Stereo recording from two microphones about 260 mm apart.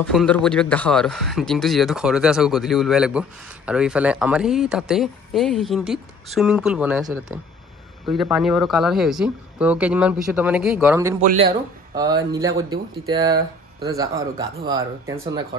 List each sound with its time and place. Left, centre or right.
0.0 s speech: centre